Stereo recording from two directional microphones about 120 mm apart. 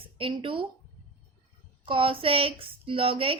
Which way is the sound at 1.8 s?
50° right (ahead or behind).